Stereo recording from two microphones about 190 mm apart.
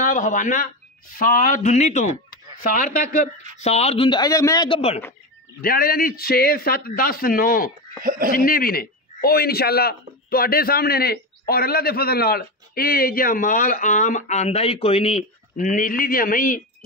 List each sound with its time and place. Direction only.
0.0 s a man's voice: 40° left (ahead or behind)
3.6 s speech: 35° left (ahead or behind)
5.6 s a man's voice: 50° left (ahead or behind)
8.0 s speech: 50° right (ahead or behind)
8.3 s a man's voice: 50° left (ahead or behind)